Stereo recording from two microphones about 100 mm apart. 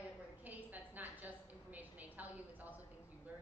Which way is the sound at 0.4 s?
15° right (ahead or behind).